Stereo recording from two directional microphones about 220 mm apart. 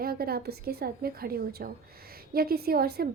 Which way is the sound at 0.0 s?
45° right (ahead or behind).